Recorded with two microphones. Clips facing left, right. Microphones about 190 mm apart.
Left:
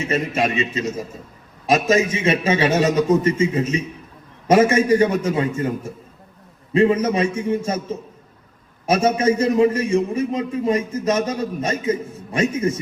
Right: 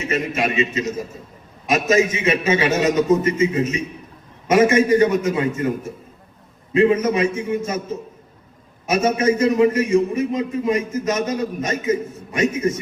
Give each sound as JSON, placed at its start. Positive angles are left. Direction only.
{"t": 0.0, "sound": "a man's voice", "side_deg": 30}
{"t": 8.9, "sound": "a man's voice", "side_deg": 30}